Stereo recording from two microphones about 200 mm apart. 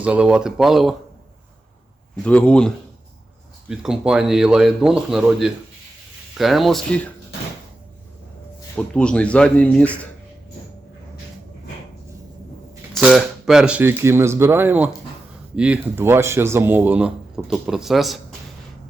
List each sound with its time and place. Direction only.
0.0 s a man's voice: 5° right (ahead or behind)
2.2 s a man's voice: 5° left (ahead or behind)
8.7 s a man's voice: 5° left (ahead or behind)
12.9 s speech: 5° right (ahead or behind)